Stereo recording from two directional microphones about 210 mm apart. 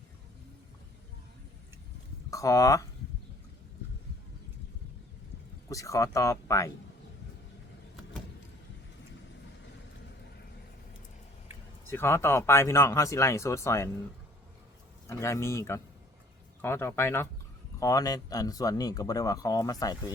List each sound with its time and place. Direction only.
2.3 s speech: 15° left (ahead or behind)
5.6 s speech: 15° left (ahead or behind)
11.9 s speech: 10° left (ahead or behind)
15.0 s speech: 15° left (ahead or behind)